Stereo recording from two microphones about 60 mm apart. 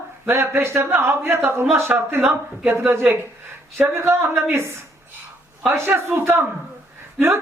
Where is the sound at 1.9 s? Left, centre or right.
Right.